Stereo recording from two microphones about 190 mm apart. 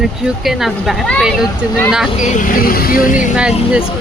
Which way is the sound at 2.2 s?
40° left (ahead or behind).